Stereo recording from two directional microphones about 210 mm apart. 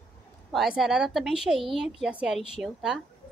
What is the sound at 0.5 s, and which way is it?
A woman's voice, centre (ahead or behind).